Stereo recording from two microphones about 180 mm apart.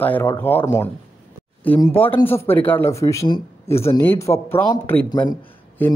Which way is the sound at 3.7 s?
35° left (ahead or behind).